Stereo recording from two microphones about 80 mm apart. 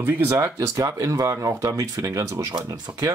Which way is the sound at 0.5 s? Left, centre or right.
Right.